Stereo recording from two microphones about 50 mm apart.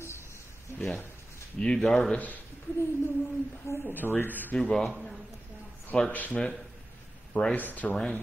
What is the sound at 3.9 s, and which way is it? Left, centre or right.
Speech, left.